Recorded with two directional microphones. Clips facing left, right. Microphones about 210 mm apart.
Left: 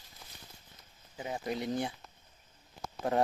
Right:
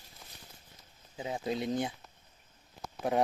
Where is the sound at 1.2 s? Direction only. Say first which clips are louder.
Right 2 dB; 20° right (ahead or behind).